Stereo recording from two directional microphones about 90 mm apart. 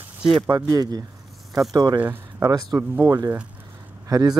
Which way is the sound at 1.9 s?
20° right (ahead or behind).